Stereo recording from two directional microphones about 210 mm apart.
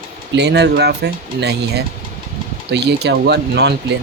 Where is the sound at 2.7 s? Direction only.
55° right (ahead or behind).